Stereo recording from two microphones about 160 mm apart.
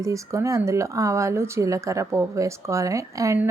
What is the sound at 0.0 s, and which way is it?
A woman's voice, 20° right (ahead or behind).